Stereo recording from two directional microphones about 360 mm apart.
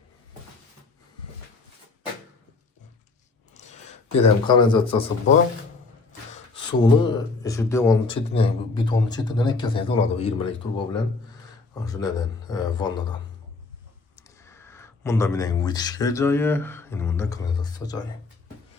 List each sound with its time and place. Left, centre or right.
3.6 s a sound: centre
4.1 s speech: centre
6.3 s speech: centre
14.2 s speech: centre